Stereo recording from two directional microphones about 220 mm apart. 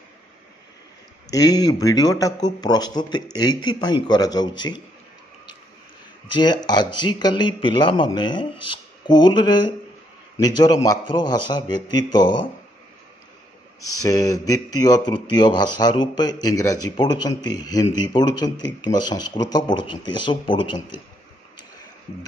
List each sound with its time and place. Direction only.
1.3 s a man's voice: 15° left (ahead or behind)
6.3 s a man's voice: 20° left (ahead or behind)
14.0 s a man's voice: 15° left (ahead or behind)